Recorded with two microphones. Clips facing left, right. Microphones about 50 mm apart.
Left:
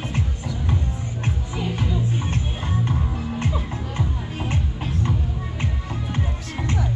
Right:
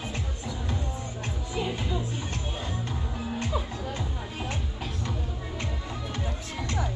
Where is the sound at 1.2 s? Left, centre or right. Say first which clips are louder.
Left 3 dB; left.